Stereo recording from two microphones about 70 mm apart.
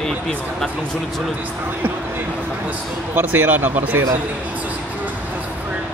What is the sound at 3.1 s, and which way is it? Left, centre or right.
Speech, right.